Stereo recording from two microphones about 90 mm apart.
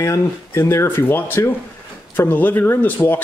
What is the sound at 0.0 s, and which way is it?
Speech, 30° left (ahead or behind).